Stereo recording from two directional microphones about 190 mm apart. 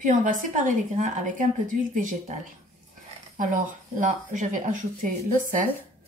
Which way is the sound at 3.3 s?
45° right (ahead or behind).